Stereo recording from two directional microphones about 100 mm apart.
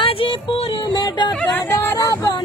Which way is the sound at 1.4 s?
20° left (ahead or behind).